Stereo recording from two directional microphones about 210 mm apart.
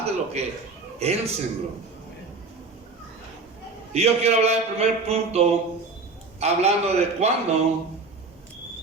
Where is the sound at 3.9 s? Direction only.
30° right (ahead or behind).